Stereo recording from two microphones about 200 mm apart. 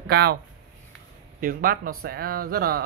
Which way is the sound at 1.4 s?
45° right (ahead or behind).